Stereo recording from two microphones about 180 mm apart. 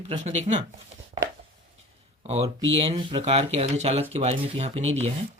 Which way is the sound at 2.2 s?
35° right (ahead or behind).